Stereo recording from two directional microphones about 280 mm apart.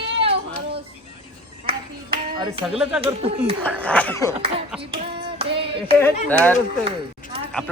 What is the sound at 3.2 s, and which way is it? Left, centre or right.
Speech, right.